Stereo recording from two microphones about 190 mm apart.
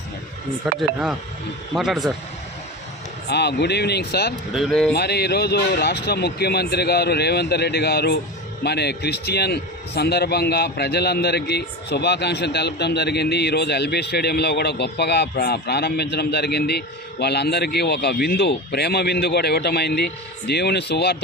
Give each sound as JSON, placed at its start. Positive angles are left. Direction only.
{"t": 0.8, "sound": "speech", "side_deg": -5}
{"t": 3.2, "sound": "a man's voice", "side_deg": 60}
{"t": 4.5, "sound": "speech", "side_deg": 0}
{"t": 4.9, "sound": "a man's voice", "side_deg": 60}